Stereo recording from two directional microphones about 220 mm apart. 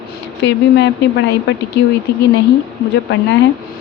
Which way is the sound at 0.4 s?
55° left (ahead or behind).